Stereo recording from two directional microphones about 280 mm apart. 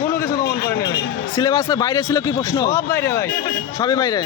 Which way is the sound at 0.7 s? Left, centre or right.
Left.